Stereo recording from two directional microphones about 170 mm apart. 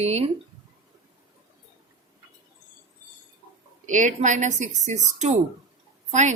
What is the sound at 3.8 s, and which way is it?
A woman's voice, 50° right (ahead or behind).